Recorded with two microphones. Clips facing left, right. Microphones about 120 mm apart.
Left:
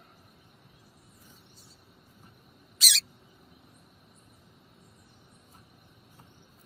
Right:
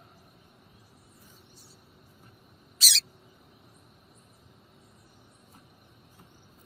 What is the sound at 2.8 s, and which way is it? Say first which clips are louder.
Rodents: left 1 dB; 30° right (ahead or behind).